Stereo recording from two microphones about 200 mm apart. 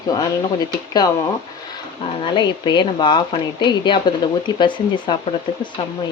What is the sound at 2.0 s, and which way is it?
Speech, 25° left (ahead or behind).